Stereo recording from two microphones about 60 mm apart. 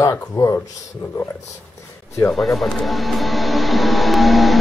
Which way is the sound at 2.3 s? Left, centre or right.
Centre.